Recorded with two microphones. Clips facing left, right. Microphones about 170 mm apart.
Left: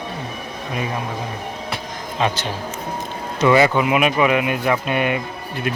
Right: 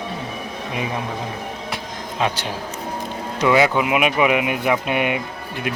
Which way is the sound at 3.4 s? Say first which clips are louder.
Left 2 dB; 5° right (ahead or behind).